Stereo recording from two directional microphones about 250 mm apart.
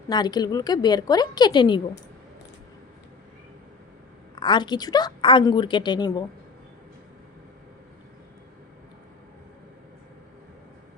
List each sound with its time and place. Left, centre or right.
0.1 s a woman's voice: centre
4.4 s a woman's voice: centre